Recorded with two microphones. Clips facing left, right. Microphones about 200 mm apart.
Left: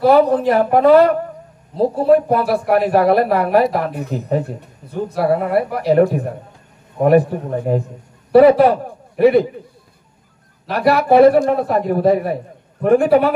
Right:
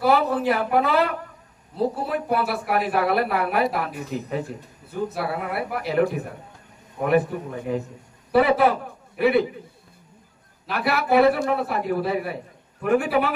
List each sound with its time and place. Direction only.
0.1 s a man's voice: 40° left (ahead or behind)
10.7 s speech: 40° left (ahead or behind)